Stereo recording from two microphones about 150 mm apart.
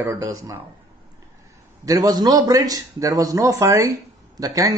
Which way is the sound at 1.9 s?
25° right (ahead or behind).